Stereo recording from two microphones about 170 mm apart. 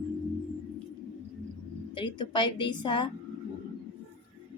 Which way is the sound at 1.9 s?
30° left (ahead or behind).